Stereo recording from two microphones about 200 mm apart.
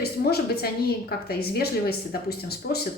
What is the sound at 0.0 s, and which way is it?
A woman's voice, 50° left (ahead or behind).